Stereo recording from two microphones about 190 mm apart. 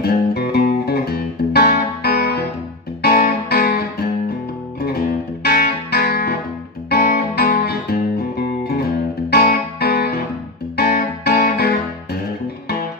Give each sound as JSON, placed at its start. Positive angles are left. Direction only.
{"t": 0.0, "sound": "music", "side_deg": 55}
{"t": 5.4, "sound": "music", "side_deg": 55}
{"t": 9.3, "sound": "music", "side_deg": 55}